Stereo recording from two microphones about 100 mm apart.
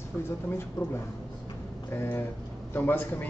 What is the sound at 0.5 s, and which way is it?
Speech, 25° left (ahead or behind).